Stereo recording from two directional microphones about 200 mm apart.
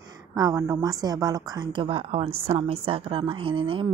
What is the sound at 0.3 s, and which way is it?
A woman's voice, 20° right (ahead or behind).